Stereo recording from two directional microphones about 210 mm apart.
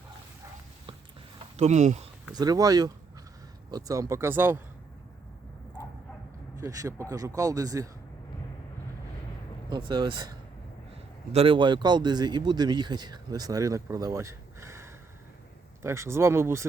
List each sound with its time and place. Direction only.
1.5 s speech: 35° right (ahead or behind)
2.3 s speech: 20° right (ahead or behind)
6.6 s speech: 15° right (ahead or behind)
9.6 s speech: 20° right (ahead or behind)